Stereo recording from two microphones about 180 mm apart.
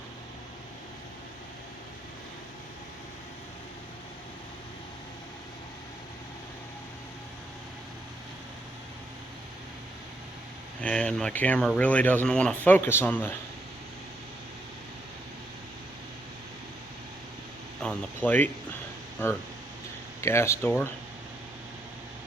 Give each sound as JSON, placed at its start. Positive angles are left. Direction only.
{"t": 10.8, "sound": "speech", "side_deg": 5}
{"t": 17.7, "sound": "speech", "side_deg": 5}
{"t": 20.2, "sound": "speech", "side_deg": 15}